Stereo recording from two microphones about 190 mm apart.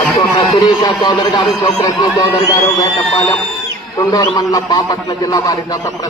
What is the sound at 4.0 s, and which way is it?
A man's voice, 20° left (ahead or behind).